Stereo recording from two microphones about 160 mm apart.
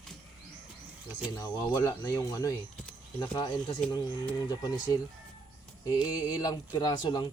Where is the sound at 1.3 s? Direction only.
20° left (ahead or behind).